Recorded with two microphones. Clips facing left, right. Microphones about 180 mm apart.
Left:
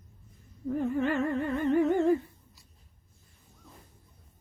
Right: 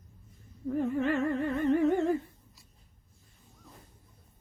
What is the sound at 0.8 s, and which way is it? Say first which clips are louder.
Humming: even; 35° right (ahead or behind).